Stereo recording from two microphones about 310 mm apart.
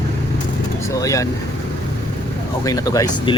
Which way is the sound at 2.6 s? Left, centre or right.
Centre.